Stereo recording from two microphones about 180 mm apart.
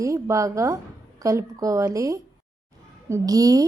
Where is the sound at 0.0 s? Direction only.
15° right (ahead or behind).